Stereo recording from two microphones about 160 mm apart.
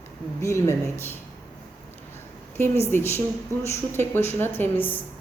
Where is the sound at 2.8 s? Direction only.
15° left (ahead or behind).